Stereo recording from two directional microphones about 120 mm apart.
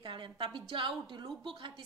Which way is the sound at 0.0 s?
40° right (ahead or behind).